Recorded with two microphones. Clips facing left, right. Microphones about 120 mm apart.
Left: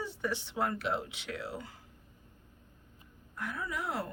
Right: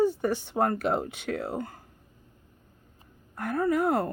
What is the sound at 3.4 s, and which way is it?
Speech, 55° right (ahead or behind).